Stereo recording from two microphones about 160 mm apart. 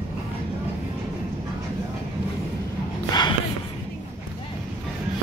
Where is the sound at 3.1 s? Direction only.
25° left (ahead or behind).